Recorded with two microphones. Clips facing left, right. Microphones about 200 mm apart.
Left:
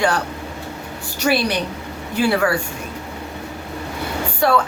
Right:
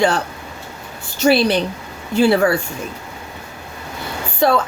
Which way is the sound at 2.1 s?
25° right (ahead or behind).